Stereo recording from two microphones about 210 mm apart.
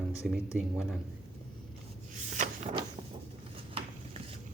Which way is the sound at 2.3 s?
35° right (ahead or behind).